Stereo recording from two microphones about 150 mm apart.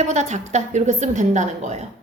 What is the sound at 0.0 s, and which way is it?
A woman's voice, 50° right (ahead or behind).